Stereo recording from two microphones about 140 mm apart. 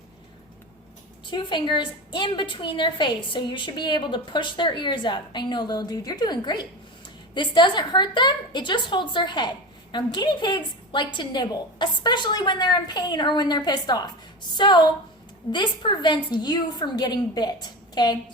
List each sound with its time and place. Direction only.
1.3 s a woman's voice: 35° left (ahead or behind)